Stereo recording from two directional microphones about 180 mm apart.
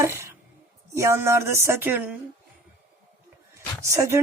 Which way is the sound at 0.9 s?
15° right (ahead or behind).